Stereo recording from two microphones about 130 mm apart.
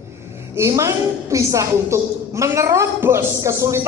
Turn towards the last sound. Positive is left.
turn(degrees=-25)  # may be behind; listen again after turning